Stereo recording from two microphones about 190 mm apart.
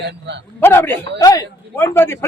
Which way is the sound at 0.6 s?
10° left (ahead or behind).